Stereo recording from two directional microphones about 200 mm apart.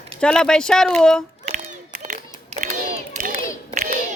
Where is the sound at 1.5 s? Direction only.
35° right (ahead or behind).